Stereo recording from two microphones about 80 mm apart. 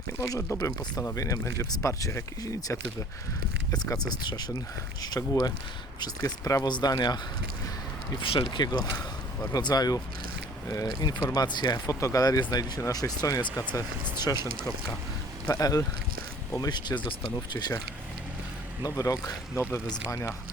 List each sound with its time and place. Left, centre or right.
0.2 s speech: left
1.1 s speech: left
3.9 s speech: left
5.3 s speech: left
6.7 s speech: left
8.2 s speech: left
11.3 s speech: left
11.9 s speech: left
12.4 s speech: left
15.4 s speech: left
16.6 s speech: left
17.5 s speech: left
18.8 s speech: left